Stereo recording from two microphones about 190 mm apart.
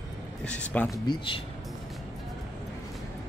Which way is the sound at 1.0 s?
25° left (ahead or behind).